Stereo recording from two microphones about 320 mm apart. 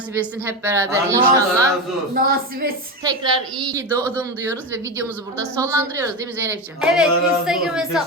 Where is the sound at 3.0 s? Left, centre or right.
Centre.